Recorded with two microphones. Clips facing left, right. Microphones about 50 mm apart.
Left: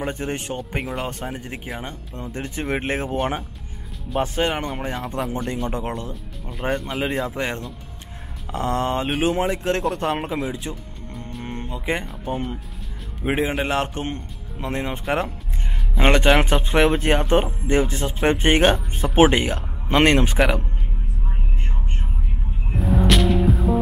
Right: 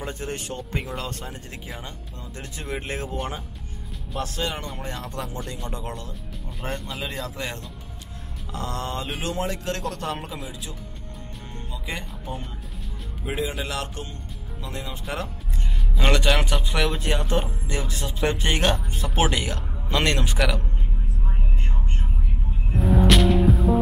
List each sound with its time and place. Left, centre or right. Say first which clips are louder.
0.0 s speech: left 5 dB; left
0.6 s speech: left 4 dB; centre
1.8 s speech: left 6 dB; left
4.2 s speech: left 7 dB; left
6.7 s speech: left 7 dB; centre
7.0 s speech: left 7 dB; left
16.0 s speech: left 5 dB; left
22.8 s music: even; centre